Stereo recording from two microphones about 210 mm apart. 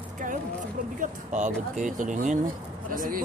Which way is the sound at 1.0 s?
35° right (ahead or behind).